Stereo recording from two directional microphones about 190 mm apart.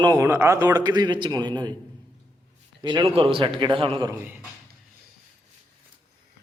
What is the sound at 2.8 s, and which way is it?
A man's voice, 25° right (ahead or behind).